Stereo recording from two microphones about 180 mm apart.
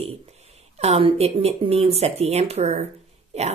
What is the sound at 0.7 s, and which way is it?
A woman's voice, 35° right (ahead or behind).